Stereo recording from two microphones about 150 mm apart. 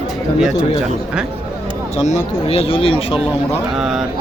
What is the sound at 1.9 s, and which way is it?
Speech, 50° left (ahead or behind).